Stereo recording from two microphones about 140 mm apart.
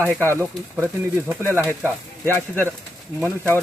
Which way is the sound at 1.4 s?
15° left (ahead or behind).